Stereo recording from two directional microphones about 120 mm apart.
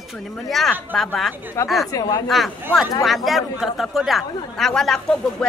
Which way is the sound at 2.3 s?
Centre (ahead or behind).